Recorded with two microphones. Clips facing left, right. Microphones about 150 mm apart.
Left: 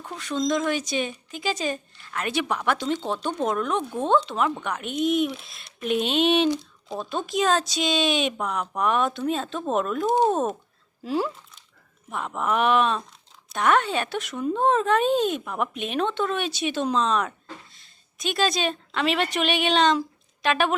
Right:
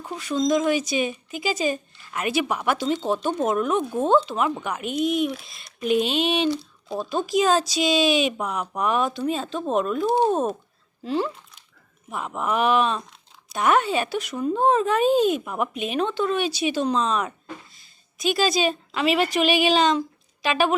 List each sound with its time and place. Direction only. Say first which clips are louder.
0.0 s a woman's voice: right 3 dB; 5° right (ahead or behind)
17.7 s a sound: right 5 dB; 5° right (ahead or behind)
18.9 s speech: right 3 dB; 5° right (ahead or behind)